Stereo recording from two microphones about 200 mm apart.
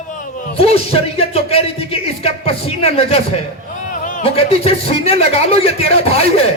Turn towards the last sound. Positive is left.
turn(degrees=30)  # may be behind; listen again after turning